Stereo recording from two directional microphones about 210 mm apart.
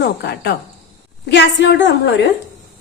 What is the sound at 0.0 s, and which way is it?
A woman's voice, 50° left (ahead or behind).